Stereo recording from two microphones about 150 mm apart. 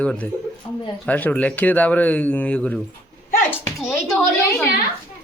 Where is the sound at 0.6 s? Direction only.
35° left (ahead or behind).